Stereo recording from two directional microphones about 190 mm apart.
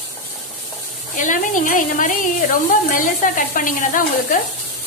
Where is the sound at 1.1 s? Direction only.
45° left (ahead or behind).